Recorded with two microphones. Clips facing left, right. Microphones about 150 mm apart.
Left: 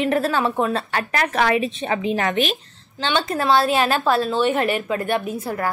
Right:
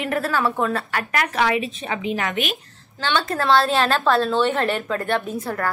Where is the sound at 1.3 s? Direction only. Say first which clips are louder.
Left 2 dB; 45° left (ahead or behind).